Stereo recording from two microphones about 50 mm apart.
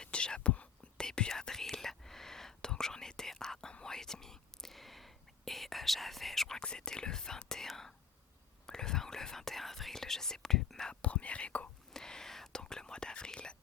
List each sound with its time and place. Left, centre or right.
0.0 s whispering: centre
6.6 s whispering: centre
11.0 s whispering: left
11.9 s whispering: centre